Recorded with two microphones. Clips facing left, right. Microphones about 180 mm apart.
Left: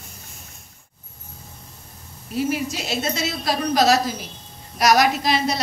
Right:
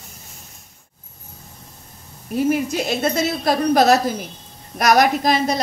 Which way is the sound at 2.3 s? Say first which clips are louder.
Right 5 dB; 50° right (ahead or behind).